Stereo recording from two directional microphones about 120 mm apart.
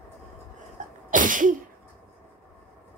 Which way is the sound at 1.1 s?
90° right.